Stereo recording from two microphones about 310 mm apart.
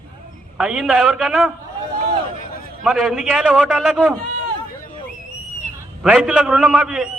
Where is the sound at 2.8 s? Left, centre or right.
Centre.